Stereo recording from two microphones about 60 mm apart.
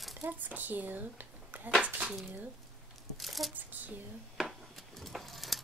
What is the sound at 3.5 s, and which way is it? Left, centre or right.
Speech, right.